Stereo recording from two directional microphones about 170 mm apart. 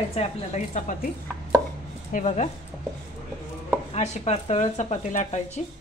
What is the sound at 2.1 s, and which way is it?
Speech, 45° left (ahead or behind).